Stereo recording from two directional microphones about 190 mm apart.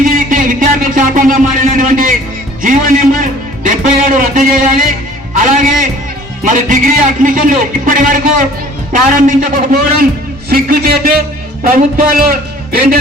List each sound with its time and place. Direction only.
0.0 s music: 45° right (ahead or behind)
2.6 s a man's voice: 45° right (ahead or behind)